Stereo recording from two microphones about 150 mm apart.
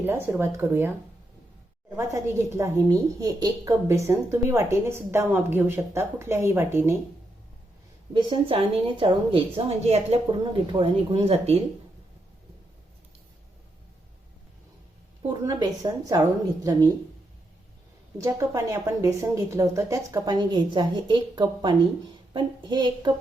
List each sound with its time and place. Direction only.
0.0 s a woman's voice: 15° right (ahead or behind)
2.0 s a woman's voice: 20° right (ahead or behind)
8.1 s a woman's voice: 35° right (ahead or behind)
15.3 s a woman's voice: 25° right (ahead or behind)
18.2 s a woman's voice: 20° right (ahead or behind)